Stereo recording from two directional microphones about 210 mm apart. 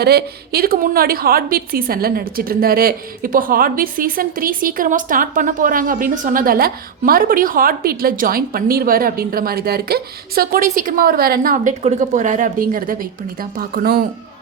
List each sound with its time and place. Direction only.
0.0 s a woman's voice: 50° right (ahead or behind)